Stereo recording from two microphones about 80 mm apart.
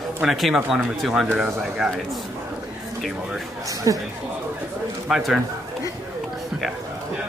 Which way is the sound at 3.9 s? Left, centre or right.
Right.